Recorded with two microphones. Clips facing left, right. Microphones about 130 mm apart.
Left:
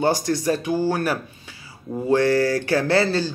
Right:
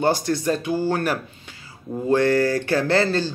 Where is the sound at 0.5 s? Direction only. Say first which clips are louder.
Left 1 dB; 15° left (ahead or behind).